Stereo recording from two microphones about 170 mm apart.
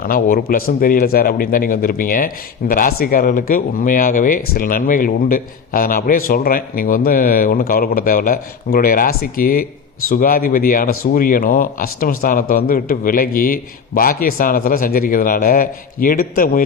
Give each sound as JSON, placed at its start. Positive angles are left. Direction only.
{"t": 0.0, "sound": "speech", "side_deg": 60}